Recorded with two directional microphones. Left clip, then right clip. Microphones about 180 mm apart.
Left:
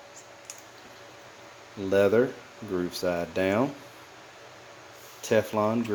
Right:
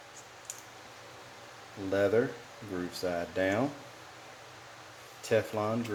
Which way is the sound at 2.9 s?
50° left (ahead or behind).